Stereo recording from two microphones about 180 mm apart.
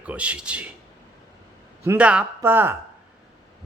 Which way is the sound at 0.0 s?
5° right (ahead or behind).